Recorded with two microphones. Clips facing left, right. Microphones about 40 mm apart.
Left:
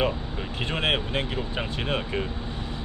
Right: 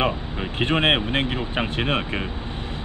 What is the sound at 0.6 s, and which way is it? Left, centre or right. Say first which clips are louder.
Speech: right 6 dB; right.